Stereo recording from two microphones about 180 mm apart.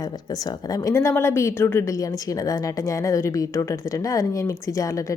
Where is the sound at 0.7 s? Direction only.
20° left (ahead or behind).